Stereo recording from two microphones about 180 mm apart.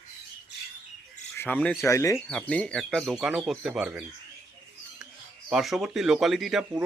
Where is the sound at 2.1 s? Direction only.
5° left (ahead or behind).